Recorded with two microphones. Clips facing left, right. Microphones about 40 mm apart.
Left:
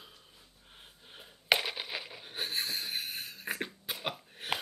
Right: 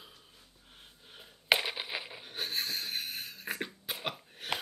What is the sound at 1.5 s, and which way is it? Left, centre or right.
Coin, centre.